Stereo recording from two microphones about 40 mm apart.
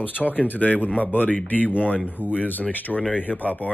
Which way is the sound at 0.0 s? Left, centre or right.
Left.